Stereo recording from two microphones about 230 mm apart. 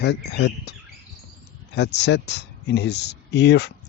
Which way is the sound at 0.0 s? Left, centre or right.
Left.